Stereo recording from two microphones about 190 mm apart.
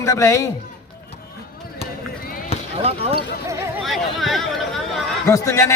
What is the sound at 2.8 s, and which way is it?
Speech, 30° right (ahead or behind).